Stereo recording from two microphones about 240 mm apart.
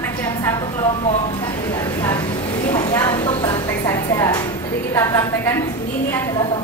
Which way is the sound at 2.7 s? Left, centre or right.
Centre.